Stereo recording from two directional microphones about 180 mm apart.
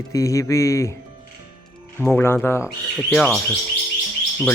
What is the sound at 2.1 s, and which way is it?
Speech, 10° left (ahead or behind).